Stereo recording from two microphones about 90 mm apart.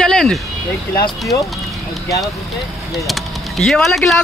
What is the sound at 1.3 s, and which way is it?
Speech, 60° left (ahead or behind).